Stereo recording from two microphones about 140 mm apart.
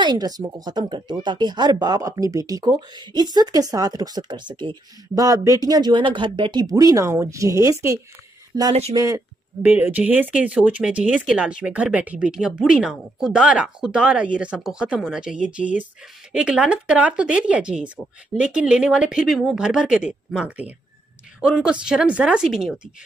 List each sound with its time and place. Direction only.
0.0 s speech: 30° right (ahead or behind)
9.6 s a woman's voice: 10° right (ahead or behind)